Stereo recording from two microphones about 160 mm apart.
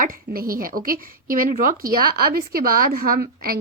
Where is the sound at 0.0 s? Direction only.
65° right (ahead or behind).